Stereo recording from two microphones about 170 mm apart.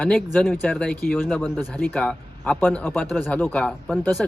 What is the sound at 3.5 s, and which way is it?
Speech, centre (ahead or behind).